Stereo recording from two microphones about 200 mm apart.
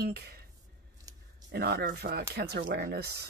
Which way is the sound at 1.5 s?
55° right (ahead or behind).